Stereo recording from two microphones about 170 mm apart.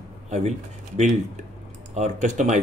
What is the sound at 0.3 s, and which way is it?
A man's voice, 40° right (ahead or behind).